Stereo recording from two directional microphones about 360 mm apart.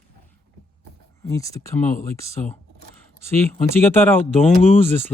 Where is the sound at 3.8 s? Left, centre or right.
Centre.